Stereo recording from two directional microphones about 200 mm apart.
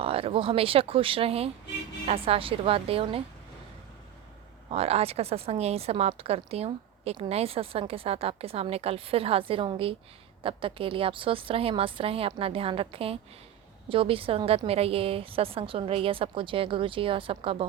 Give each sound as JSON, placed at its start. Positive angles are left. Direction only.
{"t": 0.0, "sound": "a woman's voice", "side_deg": -30}
{"t": 4.7, "sound": "a woman's voice", "side_deg": -30}